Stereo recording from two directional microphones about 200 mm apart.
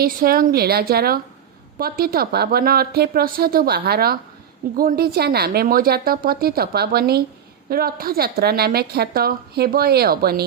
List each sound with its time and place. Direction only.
0.0 s a woman's voice: 45° right (ahead or behind)